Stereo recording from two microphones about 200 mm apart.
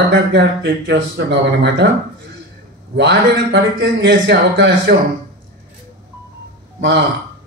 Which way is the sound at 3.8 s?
60° right (ahead or behind).